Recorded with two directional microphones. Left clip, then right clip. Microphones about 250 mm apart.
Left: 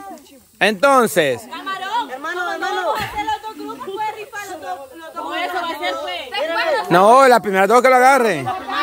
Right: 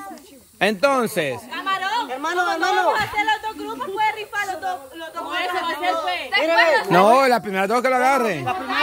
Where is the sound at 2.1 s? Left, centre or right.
Right.